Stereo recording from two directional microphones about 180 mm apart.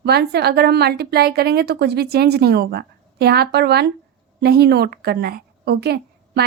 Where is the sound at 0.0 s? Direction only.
60° right (ahead or behind).